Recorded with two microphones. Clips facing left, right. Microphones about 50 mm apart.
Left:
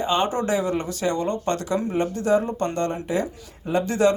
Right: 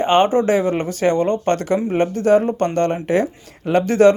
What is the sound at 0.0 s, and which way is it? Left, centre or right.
Speech, right.